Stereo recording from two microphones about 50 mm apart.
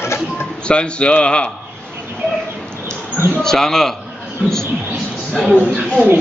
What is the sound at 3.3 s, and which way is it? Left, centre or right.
Speech, centre.